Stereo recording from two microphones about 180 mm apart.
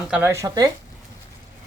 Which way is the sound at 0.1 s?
15° right (ahead or behind).